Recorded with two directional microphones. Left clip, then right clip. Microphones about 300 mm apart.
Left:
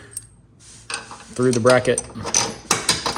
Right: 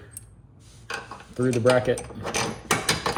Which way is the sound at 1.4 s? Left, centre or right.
Left.